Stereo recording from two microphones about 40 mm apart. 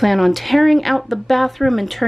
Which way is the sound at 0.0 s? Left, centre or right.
Centre.